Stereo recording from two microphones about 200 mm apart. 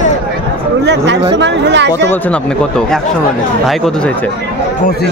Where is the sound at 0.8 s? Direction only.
60° right (ahead or behind).